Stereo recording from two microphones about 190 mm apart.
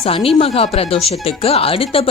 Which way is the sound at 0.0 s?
30° left (ahead or behind).